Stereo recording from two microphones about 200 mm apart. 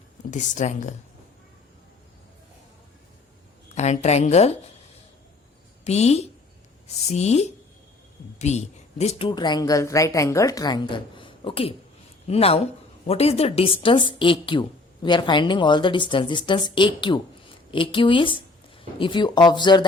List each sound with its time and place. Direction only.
0.3 s a woman's voice: 35° left (ahead or behind)
3.8 s a woman's voice: 35° left (ahead or behind)
5.8 s a woman's voice: 35° left (ahead or behind)